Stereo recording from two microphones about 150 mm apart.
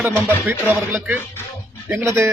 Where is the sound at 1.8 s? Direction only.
15° right (ahead or behind).